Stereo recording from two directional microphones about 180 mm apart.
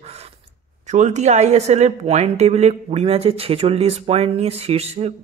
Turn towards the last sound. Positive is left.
turn(degrees=-35)  # may be behind; listen again after turning